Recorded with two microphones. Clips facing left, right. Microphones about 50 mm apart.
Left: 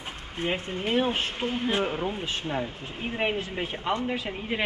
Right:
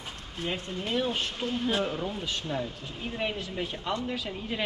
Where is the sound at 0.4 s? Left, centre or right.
Left.